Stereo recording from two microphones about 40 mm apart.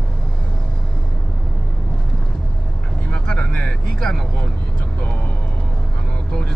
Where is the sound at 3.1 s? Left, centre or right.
Left.